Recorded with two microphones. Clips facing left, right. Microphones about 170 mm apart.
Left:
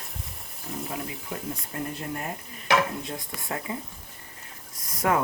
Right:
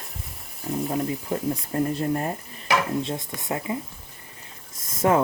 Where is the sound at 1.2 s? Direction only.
35° right (ahead or behind).